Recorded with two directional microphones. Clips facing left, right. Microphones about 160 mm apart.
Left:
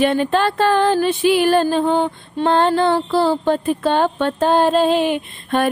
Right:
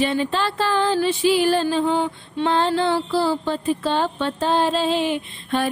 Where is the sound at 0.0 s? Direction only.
55° left (ahead or behind).